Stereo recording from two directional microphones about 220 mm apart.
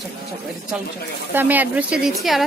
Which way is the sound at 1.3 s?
10° right (ahead or behind).